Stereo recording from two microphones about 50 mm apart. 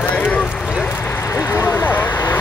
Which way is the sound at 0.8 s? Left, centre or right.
Left.